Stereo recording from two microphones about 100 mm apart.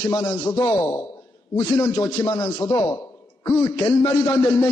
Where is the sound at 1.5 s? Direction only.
50° left (ahead or behind).